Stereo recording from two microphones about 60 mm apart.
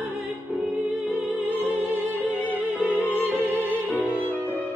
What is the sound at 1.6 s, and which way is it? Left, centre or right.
Music, right.